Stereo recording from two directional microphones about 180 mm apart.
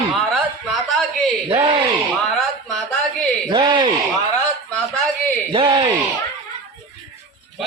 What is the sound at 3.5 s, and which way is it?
Speech, 25° right (ahead or behind).